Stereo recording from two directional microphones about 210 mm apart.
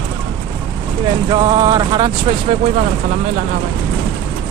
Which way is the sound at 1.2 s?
20° right (ahead or behind).